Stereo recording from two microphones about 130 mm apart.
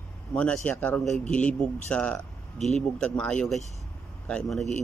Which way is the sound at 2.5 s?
60° left (ahead or behind).